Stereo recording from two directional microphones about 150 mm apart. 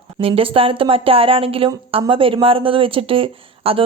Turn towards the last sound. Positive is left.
turn(degrees=-35)  # may be behind; listen again after turning